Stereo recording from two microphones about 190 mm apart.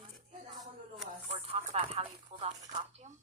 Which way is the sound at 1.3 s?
30° right (ahead or behind).